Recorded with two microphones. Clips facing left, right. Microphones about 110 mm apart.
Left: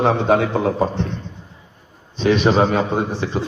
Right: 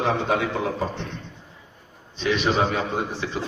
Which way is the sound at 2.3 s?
30° left (ahead or behind).